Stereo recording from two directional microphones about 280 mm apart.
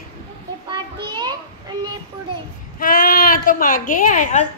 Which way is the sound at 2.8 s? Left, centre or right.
Left.